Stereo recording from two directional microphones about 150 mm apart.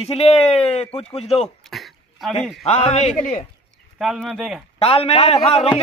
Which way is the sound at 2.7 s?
45° left (ahead or behind).